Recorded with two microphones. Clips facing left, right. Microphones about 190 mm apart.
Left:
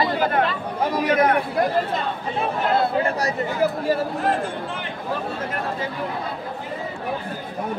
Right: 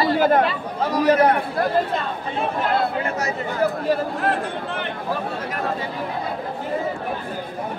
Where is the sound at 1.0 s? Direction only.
35° right (ahead or behind).